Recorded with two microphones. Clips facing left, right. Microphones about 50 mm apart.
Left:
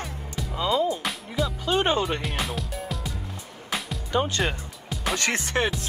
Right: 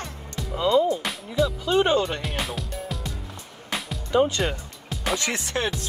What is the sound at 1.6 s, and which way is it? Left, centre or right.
Music, left.